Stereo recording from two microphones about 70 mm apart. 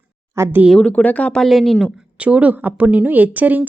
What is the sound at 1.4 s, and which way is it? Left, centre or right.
Speech, centre.